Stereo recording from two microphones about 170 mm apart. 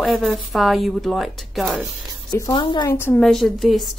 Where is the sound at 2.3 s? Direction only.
20° left (ahead or behind).